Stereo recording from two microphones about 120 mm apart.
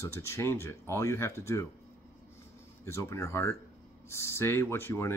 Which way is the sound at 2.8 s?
25° left (ahead or behind).